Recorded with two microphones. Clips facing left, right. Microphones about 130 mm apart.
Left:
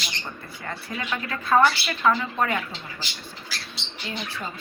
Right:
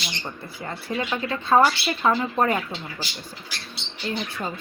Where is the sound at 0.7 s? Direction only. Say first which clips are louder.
Right 3 dB; 25° right (ahead or behind).